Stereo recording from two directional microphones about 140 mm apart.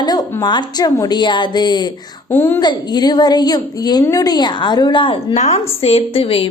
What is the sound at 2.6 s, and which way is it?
A woman's voice, 30° left (ahead or behind).